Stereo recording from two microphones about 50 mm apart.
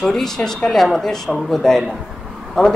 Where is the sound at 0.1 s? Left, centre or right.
Centre.